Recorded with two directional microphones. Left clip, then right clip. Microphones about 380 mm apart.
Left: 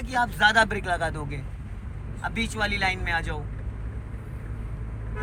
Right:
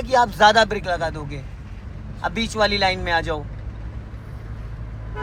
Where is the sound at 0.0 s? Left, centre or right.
Centre.